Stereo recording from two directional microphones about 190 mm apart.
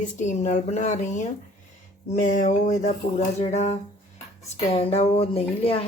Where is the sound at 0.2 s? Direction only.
40° left (ahead or behind).